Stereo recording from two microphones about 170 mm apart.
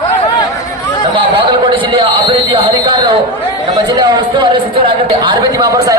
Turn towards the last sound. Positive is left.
turn(degrees=-25)  # may be behind; listen again after turning